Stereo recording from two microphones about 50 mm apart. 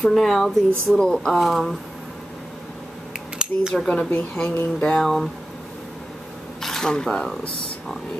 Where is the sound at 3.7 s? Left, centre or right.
Centre.